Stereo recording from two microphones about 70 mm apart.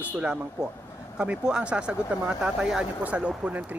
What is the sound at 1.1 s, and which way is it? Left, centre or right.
Speech, centre.